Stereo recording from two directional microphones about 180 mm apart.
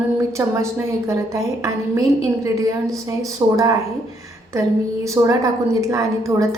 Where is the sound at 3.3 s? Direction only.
20° right (ahead or behind).